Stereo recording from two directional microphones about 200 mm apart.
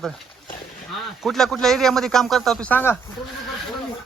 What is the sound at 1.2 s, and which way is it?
A man's voice, centre (ahead or behind).